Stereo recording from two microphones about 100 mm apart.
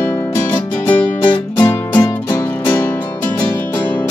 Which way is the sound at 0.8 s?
20° left (ahead or behind).